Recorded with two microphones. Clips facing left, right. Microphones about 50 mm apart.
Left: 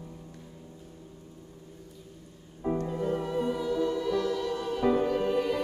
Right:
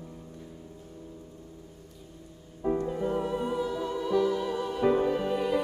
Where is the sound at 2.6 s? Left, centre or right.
Centre.